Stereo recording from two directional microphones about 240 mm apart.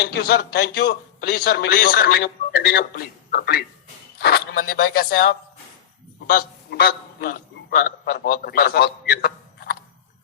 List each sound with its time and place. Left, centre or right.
0.0 s a man's voice: left